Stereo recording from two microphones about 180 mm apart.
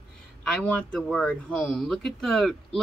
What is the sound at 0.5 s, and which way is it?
A woman's voice, centre (ahead or behind).